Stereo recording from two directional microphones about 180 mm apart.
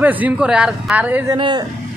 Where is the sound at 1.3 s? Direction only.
25° right (ahead or behind).